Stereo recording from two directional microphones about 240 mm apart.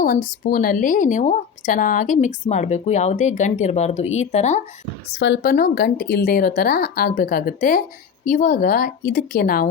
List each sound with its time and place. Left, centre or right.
0.0 s speech: left
5.1 s speech: left